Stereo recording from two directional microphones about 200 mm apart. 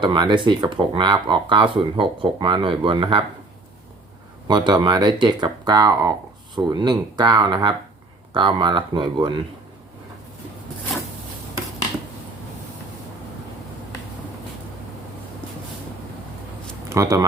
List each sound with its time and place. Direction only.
0.0 s speech: 20° right (ahead or behind)
4.4 s speech: 20° right (ahead or behind)
16.9 s speech: 15° right (ahead or behind)